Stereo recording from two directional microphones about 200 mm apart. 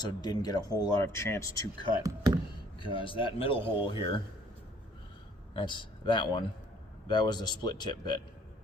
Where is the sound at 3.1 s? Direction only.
25° left (ahead or behind).